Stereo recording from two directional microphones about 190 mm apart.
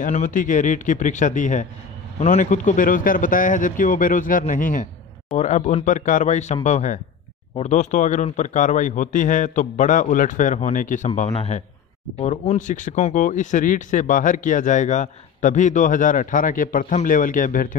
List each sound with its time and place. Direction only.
0.0 s a man's voice: 40° left (ahead or behind)